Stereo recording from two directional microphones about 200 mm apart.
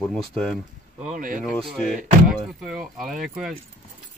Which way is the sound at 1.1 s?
45° right (ahead or behind).